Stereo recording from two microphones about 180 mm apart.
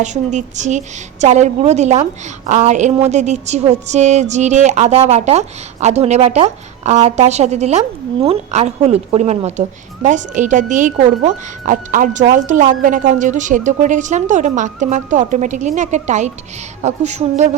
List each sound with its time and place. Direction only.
0.0 s speech: 40° right (ahead or behind)